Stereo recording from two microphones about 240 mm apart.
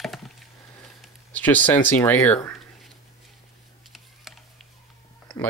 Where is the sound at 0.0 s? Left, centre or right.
Centre.